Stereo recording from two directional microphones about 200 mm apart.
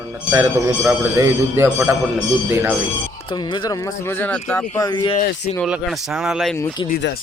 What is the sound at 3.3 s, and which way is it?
Speech, 20° left (ahead or behind).